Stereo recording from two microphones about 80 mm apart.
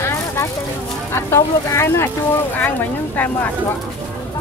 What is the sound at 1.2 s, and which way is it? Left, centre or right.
Speech, left.